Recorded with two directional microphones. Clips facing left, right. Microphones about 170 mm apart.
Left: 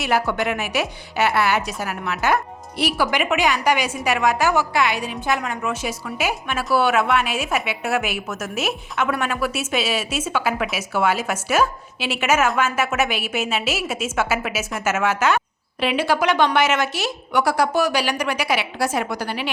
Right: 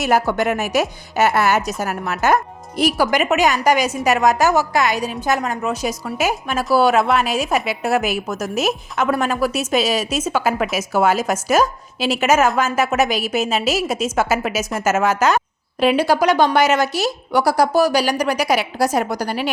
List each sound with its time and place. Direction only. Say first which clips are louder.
0.0 s speech: right 4 dB; 45° right (ahead or behind)